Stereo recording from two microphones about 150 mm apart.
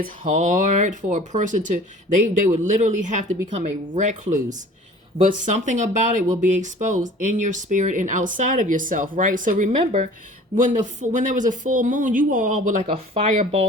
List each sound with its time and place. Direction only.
0.0 s speech: 55° right (ahead or behind)
9.7 s speech: 45° right (ahead or behind)
10.6 s speech: 55° right (ahead or behind)